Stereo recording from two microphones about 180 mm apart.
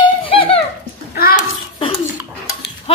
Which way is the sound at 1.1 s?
55° left (ahead or behind).